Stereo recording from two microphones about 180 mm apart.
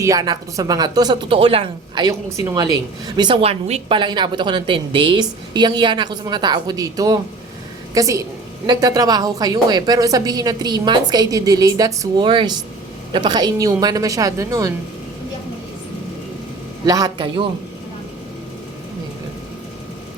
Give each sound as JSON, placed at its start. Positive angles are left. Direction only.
{"t": 0.0, "sound": "a woman's voice", "side_deg": -20}
{"t": 2.0, "sound": "a woman's voice", "side_deg": -20}
{"t": 16.8, "sound": "a woman's voice", "side_deg": -20}